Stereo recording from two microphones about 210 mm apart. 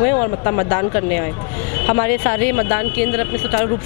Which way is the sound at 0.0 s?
25° left (ahead or behind).